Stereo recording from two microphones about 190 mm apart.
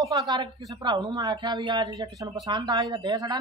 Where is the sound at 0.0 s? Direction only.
20° right (ahead or behind).